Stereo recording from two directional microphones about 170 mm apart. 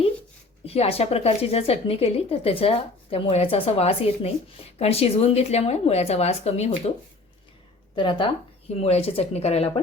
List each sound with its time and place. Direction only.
0.6 s speech: 35° left (ahead or behind)
7.9 s speech: 30° left (ahead or behind)